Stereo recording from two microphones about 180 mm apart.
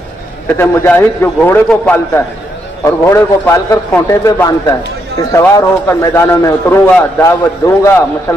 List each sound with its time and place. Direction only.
0.6 s a man's voice: 10° left (ahead or behind)